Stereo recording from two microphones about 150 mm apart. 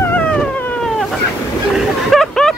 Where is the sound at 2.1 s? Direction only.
Centre (ahead or behind).